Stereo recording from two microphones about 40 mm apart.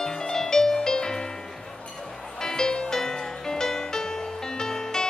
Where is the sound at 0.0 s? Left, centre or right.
Centre.